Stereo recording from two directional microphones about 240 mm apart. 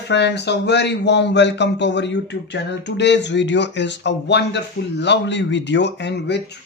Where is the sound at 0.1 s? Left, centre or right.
Left.